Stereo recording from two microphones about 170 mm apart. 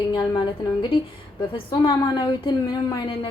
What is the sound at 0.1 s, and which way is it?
A woman's voice, 25° left (ahead or behind).